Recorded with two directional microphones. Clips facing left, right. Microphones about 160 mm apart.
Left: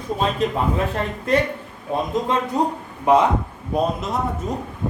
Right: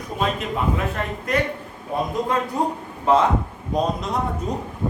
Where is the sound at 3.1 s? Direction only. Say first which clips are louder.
Left 2 dB; 15° left (ahead or behind).